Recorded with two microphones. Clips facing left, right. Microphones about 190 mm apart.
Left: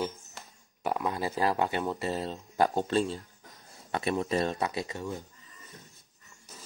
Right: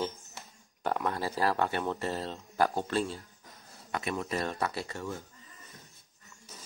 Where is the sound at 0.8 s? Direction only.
10° left (ahead or behind).